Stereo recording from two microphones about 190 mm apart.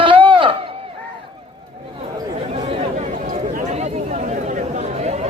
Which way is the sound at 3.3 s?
40° right (ahead or behind).